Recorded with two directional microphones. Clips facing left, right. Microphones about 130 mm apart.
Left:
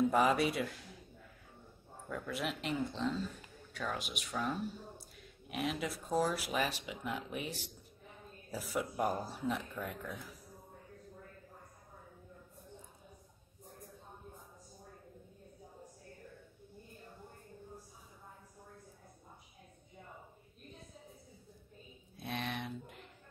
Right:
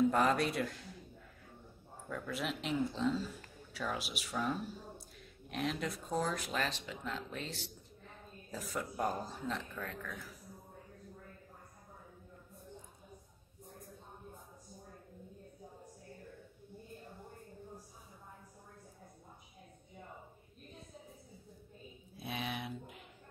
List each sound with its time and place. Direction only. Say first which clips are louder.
0.0 s a man's voice: left 1 dB; 5° left (ahead or behind)
2.0 s speech: even; centre (ahead or behind)
22.1 s speech: left 1 dB; centre (ahead or behind)